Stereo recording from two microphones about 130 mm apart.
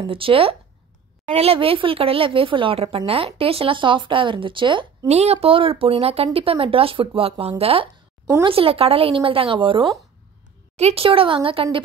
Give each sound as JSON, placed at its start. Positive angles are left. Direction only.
{"t": 0.0, "sound": "speech", "side_deg": -45}
{"t": 5.1, "sound": "speech", "side_deg": -55}
{"t": 10.8, "sound": "speech", "side_deg": -50}